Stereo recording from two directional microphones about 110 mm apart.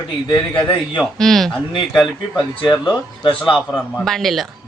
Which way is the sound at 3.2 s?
50° left (ahead or behind).